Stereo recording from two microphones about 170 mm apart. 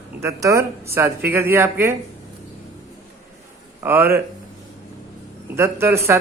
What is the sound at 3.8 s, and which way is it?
Speech, 10° right (ahead or behind).